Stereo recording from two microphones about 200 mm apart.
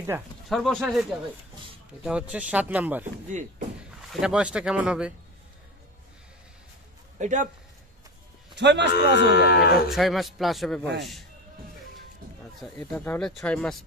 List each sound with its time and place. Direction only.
0.5 s speech: centre (ahead or behind)
2.0 s speech: 5° right (ahead or behind)
3.3 s speech: 35° right (ahead or behind)
4.1 s speech: 5° right (ahead or behind)
7.2 s a man's voice: 40° right (ahead or behind)
8.5 s a man's voice: 60° right (ahead or behind)
8.9 s speech: 60° left (ahead or behind)
9.8 s speech: centre (ahead or behind)
12.7 s speech: 10° left (ahead or behind)